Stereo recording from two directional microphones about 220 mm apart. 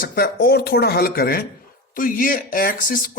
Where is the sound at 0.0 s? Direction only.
40° left (ahead or behind).